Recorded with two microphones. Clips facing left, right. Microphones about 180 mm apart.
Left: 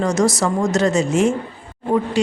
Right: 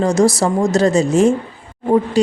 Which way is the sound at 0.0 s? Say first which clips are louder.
Right 4 dB; 30° right (ahead or behind).